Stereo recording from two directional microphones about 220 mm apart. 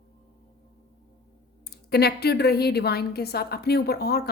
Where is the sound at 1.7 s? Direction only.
45° left (ahead or behind).